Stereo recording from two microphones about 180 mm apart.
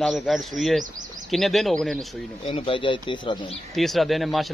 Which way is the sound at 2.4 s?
30° left (ahead or behind).